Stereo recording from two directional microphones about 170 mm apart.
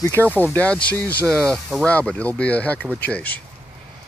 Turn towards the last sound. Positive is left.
turn(degrees=10)  # may be behind; listen again after turning